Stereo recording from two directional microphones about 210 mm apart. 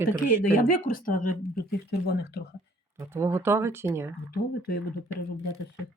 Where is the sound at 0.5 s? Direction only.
40° left (ahead or behind).